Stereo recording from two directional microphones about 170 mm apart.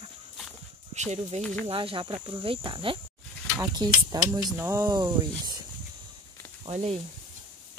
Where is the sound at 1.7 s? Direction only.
30° right (ahead or behind).